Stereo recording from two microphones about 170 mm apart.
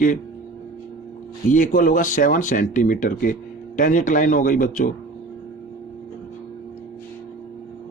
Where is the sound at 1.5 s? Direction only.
50° left (ahead or behind).